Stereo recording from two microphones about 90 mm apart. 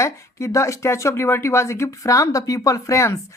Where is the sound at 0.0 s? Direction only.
35° left (ahead or behind).